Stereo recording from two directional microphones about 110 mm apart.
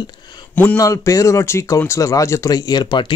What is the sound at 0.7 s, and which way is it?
Speech, 30° left (ahead or behind).